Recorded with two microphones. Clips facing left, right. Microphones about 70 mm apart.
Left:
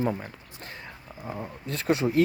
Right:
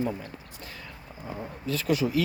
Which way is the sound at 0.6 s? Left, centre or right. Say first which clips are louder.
Left 4 dB; left.